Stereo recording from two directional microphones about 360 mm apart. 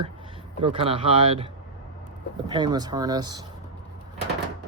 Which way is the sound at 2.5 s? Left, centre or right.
Centre.